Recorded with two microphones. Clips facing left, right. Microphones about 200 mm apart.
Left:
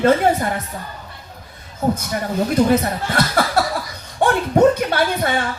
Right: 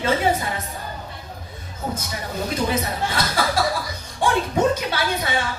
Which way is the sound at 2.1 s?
60° left (ahead or behind).